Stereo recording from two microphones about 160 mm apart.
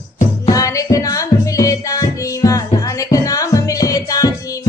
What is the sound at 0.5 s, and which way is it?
Music, 20° left (ahead or behind).